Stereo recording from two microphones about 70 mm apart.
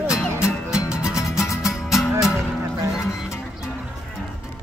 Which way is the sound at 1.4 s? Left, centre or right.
Left.